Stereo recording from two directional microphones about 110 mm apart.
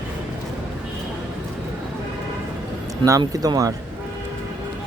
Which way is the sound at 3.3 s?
35° right (ahead or behind).